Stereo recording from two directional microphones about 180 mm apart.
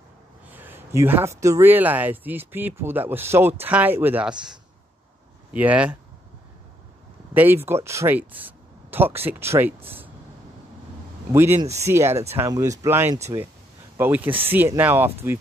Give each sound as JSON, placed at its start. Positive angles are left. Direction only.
{"t": 0.5, "sound": "speech", "side_deg": -10}
{"t": 7.3, "sound": "speech", "side_deg": -10}
{"t": 9.8, "sound": "a sound", "side_deg": -10}
{"t": 11.3, "sound": "speech", "side_deg": -15}
{"t": 11.6, "sound": "speech", "side_deg": -40}
{"t": 11.9, "sound": "speech", "side_deg": -15}